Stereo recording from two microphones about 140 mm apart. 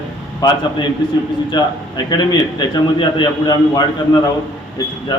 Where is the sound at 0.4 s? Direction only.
30° left (ahead or behind).